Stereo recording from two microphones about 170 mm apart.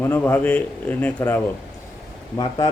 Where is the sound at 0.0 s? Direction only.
10° left (ahead or behind).